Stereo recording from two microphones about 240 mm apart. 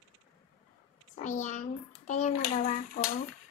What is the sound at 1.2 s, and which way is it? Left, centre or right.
A child's voice, left.